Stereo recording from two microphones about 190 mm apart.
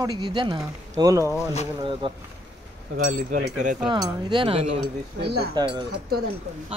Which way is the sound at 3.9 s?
25° right (ahead or behind).